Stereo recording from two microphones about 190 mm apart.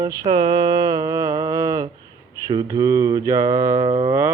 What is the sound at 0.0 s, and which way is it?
Mantra, 20° right (ahead or behind).